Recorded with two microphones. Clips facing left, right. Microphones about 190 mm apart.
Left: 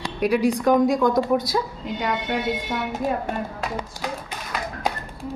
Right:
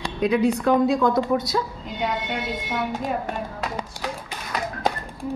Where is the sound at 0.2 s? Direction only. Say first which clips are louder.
Even; 10° left (ahead or behind).